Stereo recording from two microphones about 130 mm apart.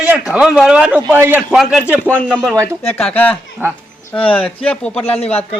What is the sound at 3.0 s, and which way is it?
Speech, 10° left (ahead or behind).